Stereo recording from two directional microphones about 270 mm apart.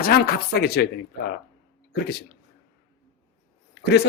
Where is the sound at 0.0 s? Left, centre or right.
Left.